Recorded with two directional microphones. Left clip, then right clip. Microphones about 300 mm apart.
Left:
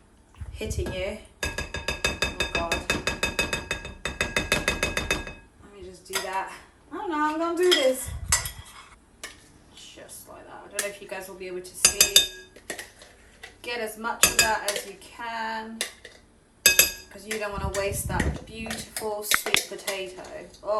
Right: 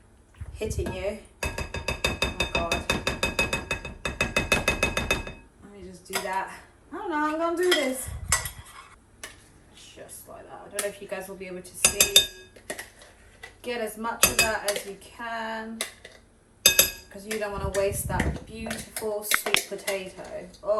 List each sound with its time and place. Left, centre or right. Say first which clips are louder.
0.6 s a sound: right 1 dB; centre
6.1 s speech: even; centre
6.9 s cutlery: left 1 dB; centre
11.3 s speech: left 4 dB; centre
13.4 s dishes: even; centre
15.2 s speech: left 1 dB; centre
16.6 s chink: left 1 dB; centre
17.2 s speech: even; centre